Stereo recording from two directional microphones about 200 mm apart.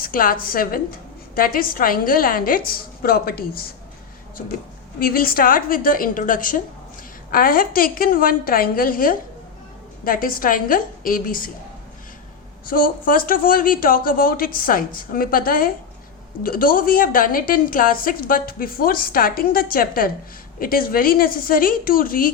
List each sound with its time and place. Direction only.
0.0 s a woman's voice: 45° left (ahead or behind)
4.9 s a woman's voice: 45° left (ahead or behind)
12.6 s a woman's voice: 45° left (ahead or behind)